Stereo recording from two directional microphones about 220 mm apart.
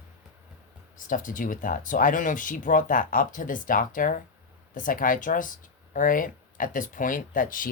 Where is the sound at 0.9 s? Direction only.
35° left (ahead or behind).